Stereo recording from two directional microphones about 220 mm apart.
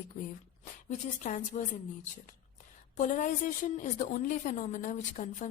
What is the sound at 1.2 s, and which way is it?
Speech, 35° left (ahead or behind).